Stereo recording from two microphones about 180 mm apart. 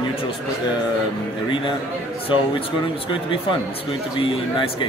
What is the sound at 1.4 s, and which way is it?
Speech, 30° left (ahead or behind).